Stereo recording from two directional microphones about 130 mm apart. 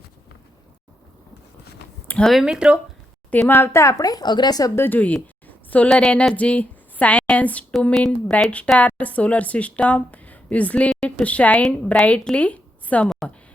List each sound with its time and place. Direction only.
2.0 s speech: 5° left (ahead or behind)
3.2 s a woman's voice: 10° left (ahead or behind)